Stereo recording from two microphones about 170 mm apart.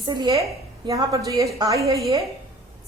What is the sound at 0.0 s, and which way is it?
A woman's voice, 25° right (ahead or behind).